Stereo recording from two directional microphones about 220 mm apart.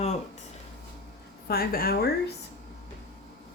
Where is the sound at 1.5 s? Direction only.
45° left (ahead or behind).